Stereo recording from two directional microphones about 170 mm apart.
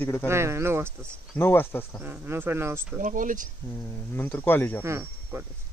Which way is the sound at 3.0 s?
50° right (ahead or behind).